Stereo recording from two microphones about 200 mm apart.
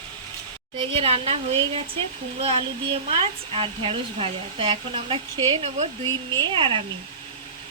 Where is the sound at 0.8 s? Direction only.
30° right (ahead or behind).